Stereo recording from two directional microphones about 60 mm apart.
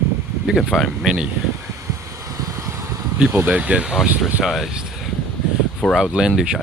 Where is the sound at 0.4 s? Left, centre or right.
Centre.